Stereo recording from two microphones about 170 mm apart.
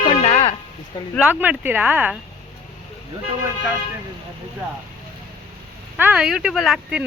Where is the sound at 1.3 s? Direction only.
10° right (ahead or behind).